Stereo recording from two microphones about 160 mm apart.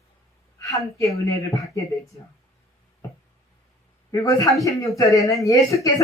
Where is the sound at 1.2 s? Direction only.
20° left (ahead or behind).